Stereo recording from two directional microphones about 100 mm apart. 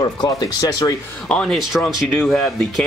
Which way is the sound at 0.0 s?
40° left (ahead or behind).